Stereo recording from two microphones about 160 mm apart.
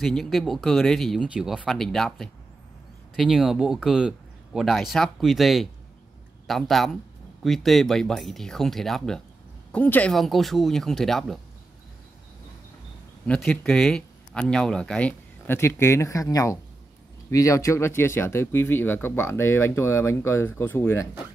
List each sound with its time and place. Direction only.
0.0 s speech: centre (ahead or behind)
13.3 s speech: 5° left (ahead or behind)